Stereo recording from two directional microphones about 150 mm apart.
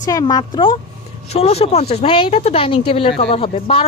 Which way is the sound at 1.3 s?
45° left (ahead or behind).